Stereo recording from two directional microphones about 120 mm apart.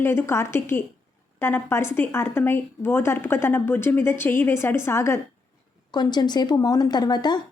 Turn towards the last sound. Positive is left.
turn(degrees=35)  # may be behind; listen again after turning